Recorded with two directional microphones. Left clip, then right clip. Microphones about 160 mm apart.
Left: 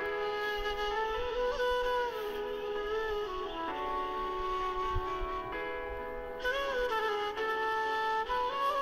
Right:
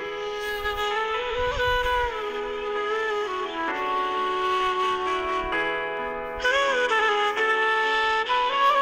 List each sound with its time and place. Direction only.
1.4 s music: 35° right (ahead or behind)
4.5 s music: 55° right (ahead or behind)
6.4 s music: 45° right (ahead or behind)